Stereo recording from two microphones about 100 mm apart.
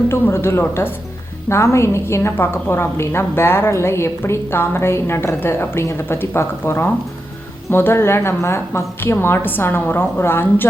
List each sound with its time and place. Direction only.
0.1 s a woman's voice: 25° left (ahead or behind)